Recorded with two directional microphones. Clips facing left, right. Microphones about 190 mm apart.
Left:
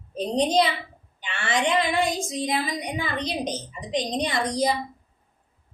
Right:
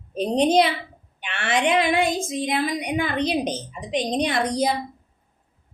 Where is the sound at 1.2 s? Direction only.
65° right (ahead or behind).